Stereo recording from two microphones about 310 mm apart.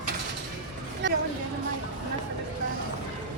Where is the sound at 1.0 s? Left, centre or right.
Right.